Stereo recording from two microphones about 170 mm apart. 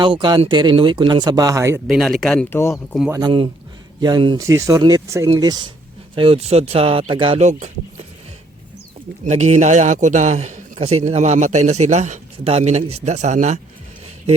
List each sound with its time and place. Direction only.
0.0 s speech: 30° right (ahead or behind)
1.9 s speech: centre (ahead or behind)
2.7 s speech: centre (ahead or behind)
3.1 s speech: 25° right (ahead or behind); by 7.7 s 40° right (ahead or behind)
9.2 s a man's voice: 45° right (ahead or behind)